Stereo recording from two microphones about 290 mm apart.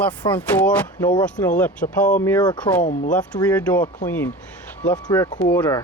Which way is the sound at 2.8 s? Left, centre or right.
Left.